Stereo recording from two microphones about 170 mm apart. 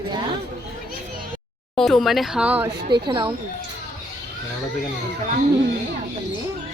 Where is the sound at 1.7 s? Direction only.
Centre (ahead or behind).